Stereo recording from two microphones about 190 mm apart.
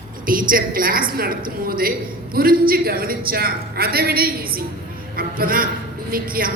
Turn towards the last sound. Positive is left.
turn(degrees=-50)  # may be behind; listen again after turning